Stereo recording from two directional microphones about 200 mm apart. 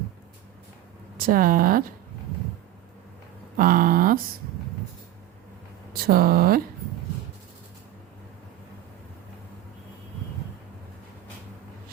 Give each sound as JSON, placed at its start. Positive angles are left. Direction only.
{"t": 1.2, "sound": "speech", "side_deg": -45}
{"t": 3.6, "sound": "a sound", "side_deg": -45}
{"t": 6.0, "sound": "speech", "side_deg": -50}